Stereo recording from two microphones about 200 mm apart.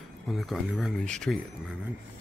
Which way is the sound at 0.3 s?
Centre (ahead or behind).